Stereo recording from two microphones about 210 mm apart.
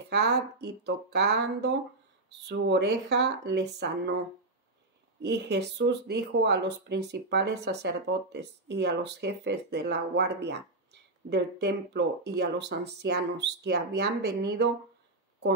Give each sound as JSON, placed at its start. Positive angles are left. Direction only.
{"t": 0.1, "sound": "speech", "side_deg": -50}
{"t": 5.2, "sound": "speech", "side_deg": -50}